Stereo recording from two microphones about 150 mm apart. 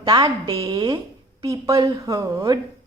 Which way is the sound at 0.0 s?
25° right (ahead or behind).